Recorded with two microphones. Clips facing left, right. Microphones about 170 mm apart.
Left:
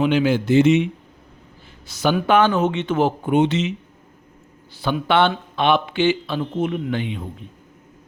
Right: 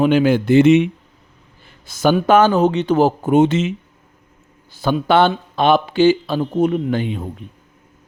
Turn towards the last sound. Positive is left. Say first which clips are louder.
# right 5 dB
turn(degrees=-40)  # may be behind; listen again after turning